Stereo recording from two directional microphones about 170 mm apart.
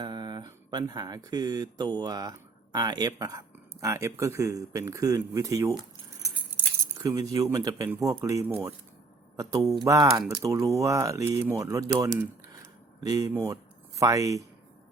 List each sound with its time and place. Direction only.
0.0 s speech: 25° right (ahead or behind)
7.1 s speech: 20° right (ahead or behind)
13.0 s speech: 20° right (ahead or behind)